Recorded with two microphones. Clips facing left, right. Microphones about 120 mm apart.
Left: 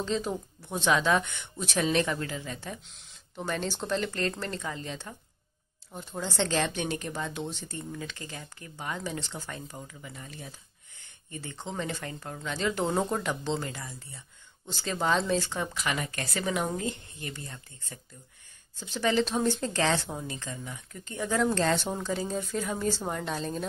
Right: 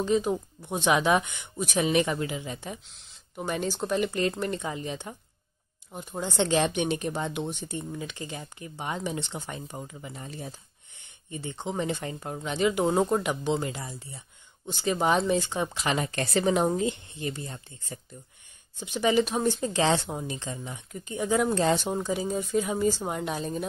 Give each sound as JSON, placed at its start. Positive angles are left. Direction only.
{"t": 0.0, "sound": "speech", "side_deg": -10}
{"t": 2.9, "sound": "a sound", "side_deg": 0}
{"t": 3.4, "sound": "speech", "side_deg": -10}
{"t": 10.2, "sound": "speech", "side_deg": -35}
{"t": 11.2, "sound": "speech", "side_deg": -20}